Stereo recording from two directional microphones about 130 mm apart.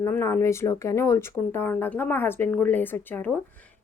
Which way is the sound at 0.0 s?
20° left (ahead or behind).